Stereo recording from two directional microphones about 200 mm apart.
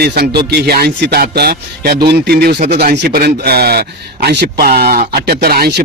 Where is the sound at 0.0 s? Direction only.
55° right (ahead or behind).